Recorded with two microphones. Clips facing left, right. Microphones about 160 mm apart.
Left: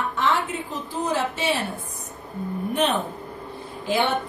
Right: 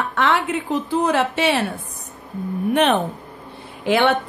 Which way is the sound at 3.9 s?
70° right (ahead or behind).